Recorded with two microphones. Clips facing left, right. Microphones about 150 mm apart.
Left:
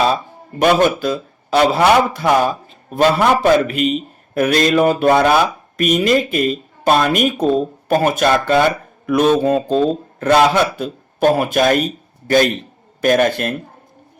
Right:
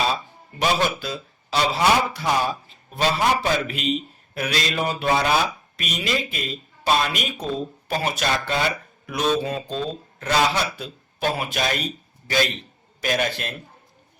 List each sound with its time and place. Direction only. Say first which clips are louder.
0.0 s a man's voice: left 8 dB; 50° left (ahead or behind)